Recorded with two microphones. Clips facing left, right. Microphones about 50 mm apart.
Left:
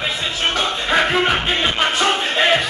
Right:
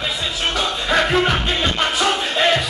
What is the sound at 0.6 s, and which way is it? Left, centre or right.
Music, centre.